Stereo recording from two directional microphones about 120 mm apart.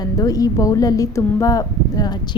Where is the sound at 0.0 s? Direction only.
30° left (ahead or behind).